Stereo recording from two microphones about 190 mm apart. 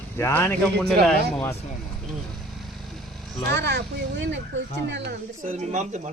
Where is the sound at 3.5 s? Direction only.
60° right (ahead or behind).